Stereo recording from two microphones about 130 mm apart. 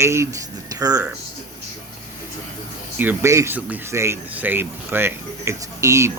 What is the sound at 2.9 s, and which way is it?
Speech, 20° right (ahead or behind).